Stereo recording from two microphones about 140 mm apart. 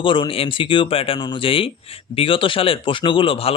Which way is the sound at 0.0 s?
35° left (ahead or behind).